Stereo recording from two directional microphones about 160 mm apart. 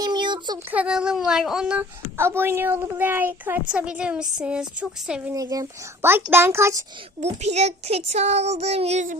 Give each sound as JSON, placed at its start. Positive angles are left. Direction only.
{"t": 0.0, "sound": "a sound", "side_deg": -30}
{"t": 0.7, "sound": "a woman's voice", "side_deg": -5}
{"t": 5.3, "sound": "a woman's voice", "side_deg": -20}
{"t": 7.4, "sound": "speech", "side_deg": -45}